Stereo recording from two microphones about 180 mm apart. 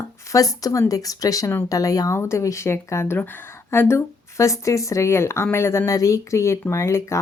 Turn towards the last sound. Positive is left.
turn(degrees=15)  # may be behind; listen again after turning